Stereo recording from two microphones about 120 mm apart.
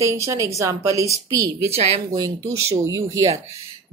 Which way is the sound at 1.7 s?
55° right (ahead or behind).